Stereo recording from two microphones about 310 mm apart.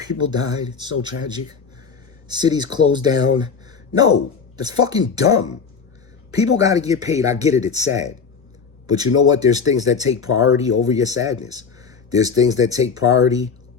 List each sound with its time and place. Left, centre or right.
0.0 s speech: centre
2.2 s speech: centre
6.6 s speech: centre
10.2 s speech: left
10.5 s speech: centre
11.4 s a sound: centre
12.4 s speech: centre